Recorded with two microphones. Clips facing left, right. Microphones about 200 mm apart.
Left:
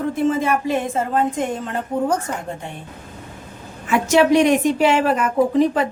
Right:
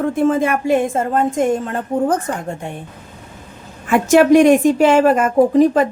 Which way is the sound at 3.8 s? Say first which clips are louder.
Right 4 dB; 50° right (ahead or behind).